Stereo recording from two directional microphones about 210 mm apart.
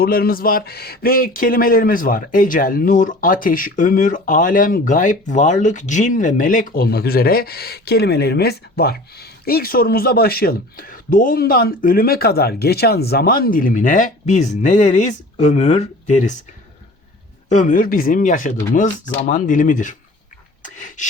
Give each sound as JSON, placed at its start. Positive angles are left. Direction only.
{"t": 0.0, "sound": "speech", "side_deg": 45}
{"t": 17.5, "sound": "speech", "side_deg": 35}
{"t": 20.6, "sound": "a sound", "side_deg": 35}